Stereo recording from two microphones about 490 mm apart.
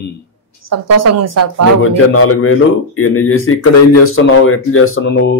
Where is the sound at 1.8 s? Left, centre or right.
Left.